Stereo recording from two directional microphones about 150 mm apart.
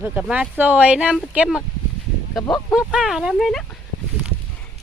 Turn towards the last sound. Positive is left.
turn(degrees=0)  # may be behind; listen again after turning